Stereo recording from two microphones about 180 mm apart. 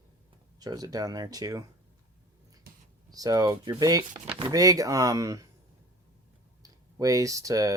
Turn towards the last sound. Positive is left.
turn(degrees=-20)  # may be behind; listen again after turning